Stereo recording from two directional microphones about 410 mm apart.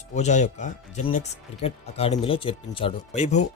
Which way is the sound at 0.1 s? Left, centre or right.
Centre.